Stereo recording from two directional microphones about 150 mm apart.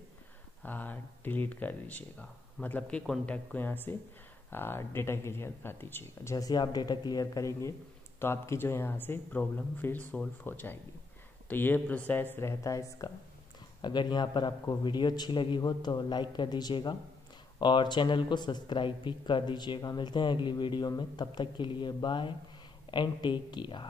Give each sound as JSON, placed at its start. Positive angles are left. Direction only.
{"t": 0.6, "sound": "a man's voice", "side_deg": 10}